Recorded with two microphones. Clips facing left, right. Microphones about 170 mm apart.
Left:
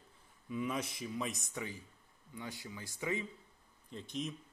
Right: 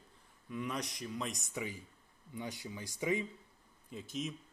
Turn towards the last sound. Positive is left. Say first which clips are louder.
# even
turn(degrees=0)  # may be behind; listen again after turning